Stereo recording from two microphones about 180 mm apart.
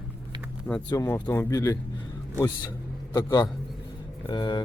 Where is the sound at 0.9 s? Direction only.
15° left (ahead or behind).